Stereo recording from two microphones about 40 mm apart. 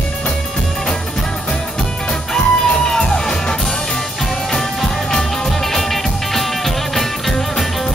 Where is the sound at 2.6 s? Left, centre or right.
Centre.